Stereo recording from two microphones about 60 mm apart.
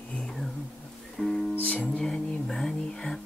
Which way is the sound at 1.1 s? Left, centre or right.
Centre.